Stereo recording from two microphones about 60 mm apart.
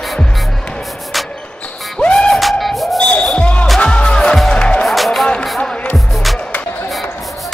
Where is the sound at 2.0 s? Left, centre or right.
Centre.